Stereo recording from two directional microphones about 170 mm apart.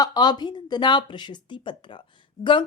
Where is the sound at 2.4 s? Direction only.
30° left (ahead or behind).